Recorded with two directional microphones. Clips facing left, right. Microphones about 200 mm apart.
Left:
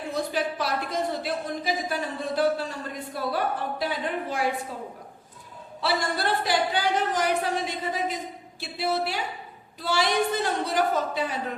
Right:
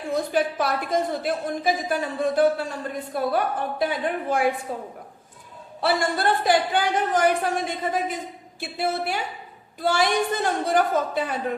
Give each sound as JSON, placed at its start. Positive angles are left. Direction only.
{"t": 0.3, "sound": "a woman's voice", "side_deg": -50}